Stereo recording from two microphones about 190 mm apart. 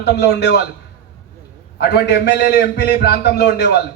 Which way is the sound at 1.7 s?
60° left (ahead or behind).